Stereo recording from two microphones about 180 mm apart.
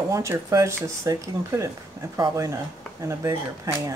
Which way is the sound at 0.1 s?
15° right (ahead or behind).